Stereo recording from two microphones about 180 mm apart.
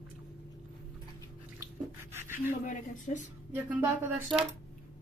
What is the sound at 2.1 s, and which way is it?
Rub, 10° right (ahead or behind).